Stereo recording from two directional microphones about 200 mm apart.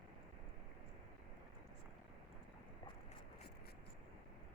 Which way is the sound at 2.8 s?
20° left (ahead or behind).